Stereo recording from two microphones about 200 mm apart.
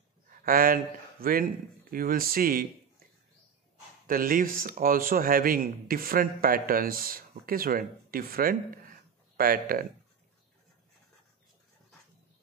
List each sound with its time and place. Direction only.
0.3 s speech: 45° right (ahead or behind)
4.1 s a man's voice: 45° right (ahead or behind)